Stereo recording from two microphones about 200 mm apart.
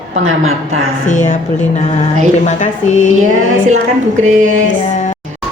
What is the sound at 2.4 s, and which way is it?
Speech, 35° left (ahead or behind).